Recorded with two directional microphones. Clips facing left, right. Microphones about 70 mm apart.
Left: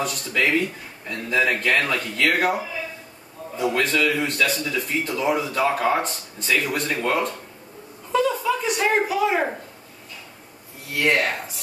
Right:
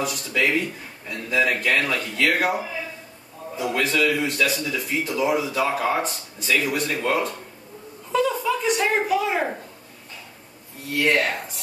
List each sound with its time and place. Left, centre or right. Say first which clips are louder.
0.0 s speech: even; centre
3.7 s speech: right 1 dB; centre
8.1 s a sound: left 1 dB; centre
8.9 s speech: left 1 dB; centre
10.9 s speech: even; centre